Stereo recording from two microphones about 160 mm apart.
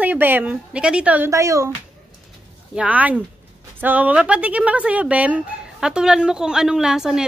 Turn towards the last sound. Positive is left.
turn(degrees=-5)  # may be behind; listen again after turning